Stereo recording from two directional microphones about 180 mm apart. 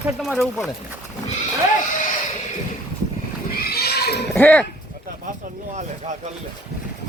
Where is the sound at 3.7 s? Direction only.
60° left (ahead or behind).